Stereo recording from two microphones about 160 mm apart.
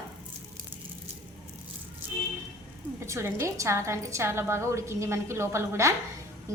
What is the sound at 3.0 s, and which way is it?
A woman's voice, 15° right (ahead or behind).